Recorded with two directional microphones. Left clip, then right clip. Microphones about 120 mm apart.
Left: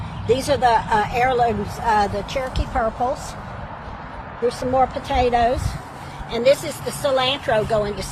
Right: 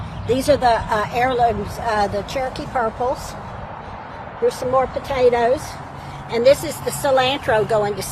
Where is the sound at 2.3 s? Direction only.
55° right (ahead or behind).